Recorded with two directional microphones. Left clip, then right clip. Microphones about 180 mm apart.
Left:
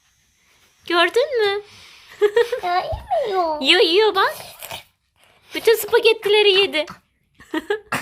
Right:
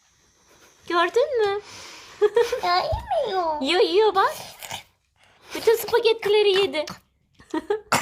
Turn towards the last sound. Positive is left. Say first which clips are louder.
# left 2 dB
turn(degrees=10)  # may be behind; listen again after turning